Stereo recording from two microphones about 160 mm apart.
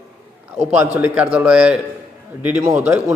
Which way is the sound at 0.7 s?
10° right (ahead or behind).